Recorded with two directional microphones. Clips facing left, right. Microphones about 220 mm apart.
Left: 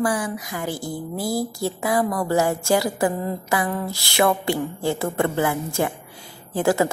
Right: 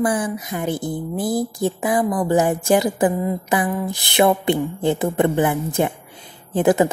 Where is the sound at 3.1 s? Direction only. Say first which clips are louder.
Right 4 dB; 15° right (ahead or behind).